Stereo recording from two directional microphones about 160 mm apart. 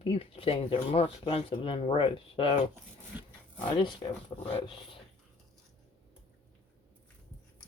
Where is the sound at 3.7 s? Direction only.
30° left (ahead or behind).